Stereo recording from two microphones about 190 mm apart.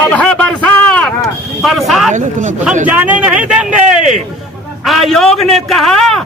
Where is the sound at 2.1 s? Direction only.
40° right (ahead or behind).